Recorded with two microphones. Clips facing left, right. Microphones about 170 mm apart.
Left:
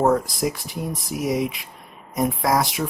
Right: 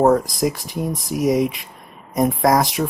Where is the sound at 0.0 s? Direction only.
45° right (ahead or behind).